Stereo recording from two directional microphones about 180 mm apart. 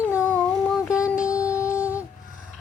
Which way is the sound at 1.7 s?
10° right (ahead or behind).